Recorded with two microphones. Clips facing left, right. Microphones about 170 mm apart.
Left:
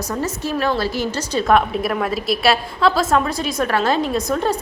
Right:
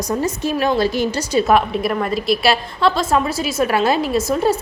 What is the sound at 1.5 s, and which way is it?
A woman's voice, centre (ahead or behind).